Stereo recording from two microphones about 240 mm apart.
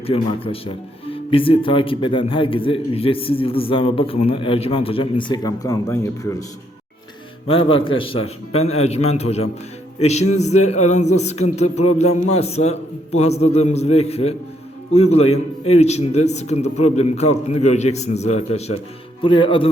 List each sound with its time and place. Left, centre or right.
0.0 s speech: left
7.4 s speech: left